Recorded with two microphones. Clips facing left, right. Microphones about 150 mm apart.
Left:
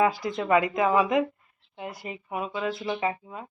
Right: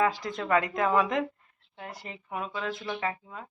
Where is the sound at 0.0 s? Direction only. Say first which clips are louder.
Left 3 dB; 10° left (ahead or behind).